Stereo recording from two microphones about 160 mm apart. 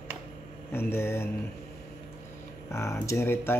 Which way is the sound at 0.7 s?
15° left (ahead or behind).